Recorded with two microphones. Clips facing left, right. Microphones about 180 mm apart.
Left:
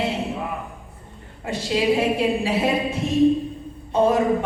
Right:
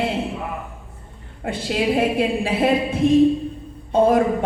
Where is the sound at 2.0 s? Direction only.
55° right (ahead or behind).